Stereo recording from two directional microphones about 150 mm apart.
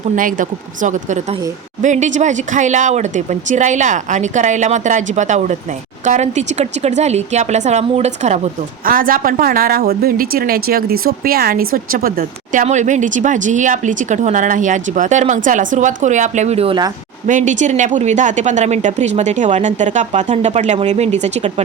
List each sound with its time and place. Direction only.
0.2 s a woman's voice: 65° right (ahead or behind)
8.8 s a woman's voice: 70° right (ahead or behind); by 16.7 s 45° right (ahead or behind)
17.2 s speech: 55° right (ahead or behind)